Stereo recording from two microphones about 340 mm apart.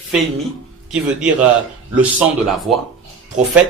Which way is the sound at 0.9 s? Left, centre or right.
Centre.